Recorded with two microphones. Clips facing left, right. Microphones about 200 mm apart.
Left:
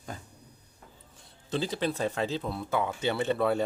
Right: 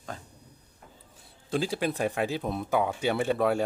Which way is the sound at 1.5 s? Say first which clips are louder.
Right 2 dB; 10° right (ahead or behind).